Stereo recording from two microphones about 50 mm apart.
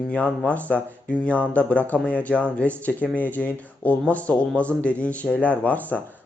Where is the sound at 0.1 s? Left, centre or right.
Left.